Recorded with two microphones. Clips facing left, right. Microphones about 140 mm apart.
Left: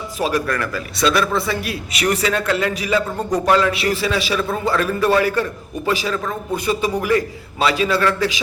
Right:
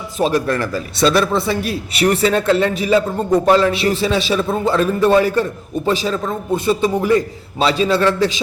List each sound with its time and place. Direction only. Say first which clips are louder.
0.2 s a man's voice: right 4 dB; 30° right (ahead or behind)